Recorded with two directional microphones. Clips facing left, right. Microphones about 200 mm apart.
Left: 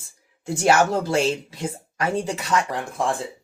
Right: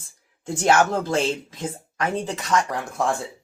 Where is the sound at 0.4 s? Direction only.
10° left (ahead or behind).